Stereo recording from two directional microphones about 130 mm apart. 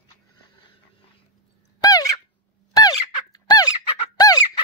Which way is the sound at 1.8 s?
25° left (ahead or behind).